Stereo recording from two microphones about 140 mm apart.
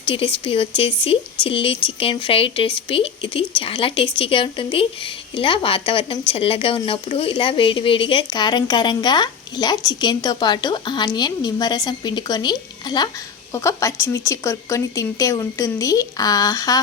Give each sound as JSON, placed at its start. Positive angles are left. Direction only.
{"t": 0.0, "sound": "speech", "side_deg": 40}